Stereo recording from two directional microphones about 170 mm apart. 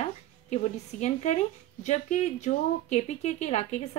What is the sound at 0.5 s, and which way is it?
A woman's voice, 45° left (ahead or behind).